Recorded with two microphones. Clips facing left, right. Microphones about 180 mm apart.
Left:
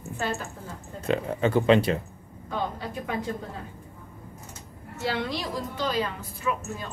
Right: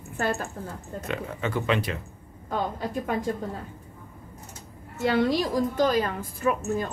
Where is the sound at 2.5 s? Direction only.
45° right (ahead or behind).